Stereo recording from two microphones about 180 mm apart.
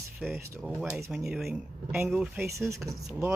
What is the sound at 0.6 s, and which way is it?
Speech, centre (ahead or behind).